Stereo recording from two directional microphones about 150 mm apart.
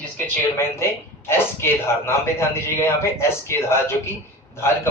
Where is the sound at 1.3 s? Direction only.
15° left (ahead or behind).